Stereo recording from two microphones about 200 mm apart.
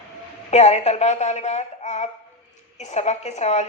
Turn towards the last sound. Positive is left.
turn(degrees=35)  # may be behind; listen again after turning